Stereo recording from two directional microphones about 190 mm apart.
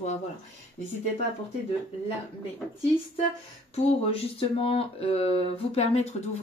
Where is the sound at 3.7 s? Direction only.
30° left (ahead or behind).